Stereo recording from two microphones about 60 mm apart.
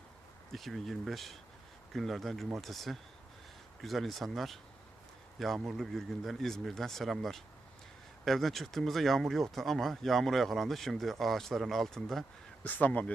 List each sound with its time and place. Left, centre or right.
0.5 s speech: centre
5.6 s speech: centre
12.6 s speech: left